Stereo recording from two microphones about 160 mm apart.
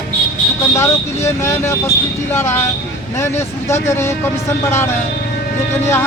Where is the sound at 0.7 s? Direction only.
15° left (ahead or behind).